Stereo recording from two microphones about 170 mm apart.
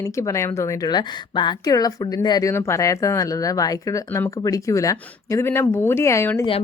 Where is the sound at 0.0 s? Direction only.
20° left (ahead or behind).